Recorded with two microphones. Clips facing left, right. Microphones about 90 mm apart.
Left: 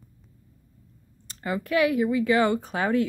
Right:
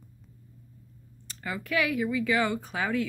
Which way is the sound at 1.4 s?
30° left (ahead or behind).